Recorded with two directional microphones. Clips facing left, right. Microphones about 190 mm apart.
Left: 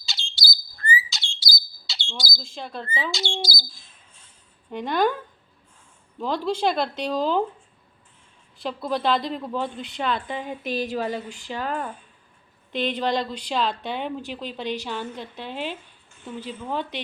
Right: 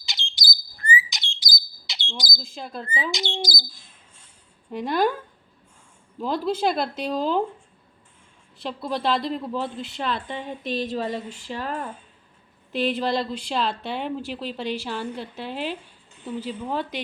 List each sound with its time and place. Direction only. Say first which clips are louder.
0.0 s bird: even; 20° right (ahead or behind)
2.4 s speech: even; 5° right (ahead or behind)
2.8 s speech: right 1 dB; 20° right (ahead or behind)
4.7 s speech: even; 5° right (ahead or behind)
6.1 s speech: even; 5° right (ahead or behind)
8.5 s speech: left 2 dB; centre (ahead or behind)
10.9 s speech: even; 30° right (ahead or behind)
12.7 s speech: right 1 dB; 5° right (ahead or behind)
16.6 s speech: right 1 dB; 10° right (ahead or behind)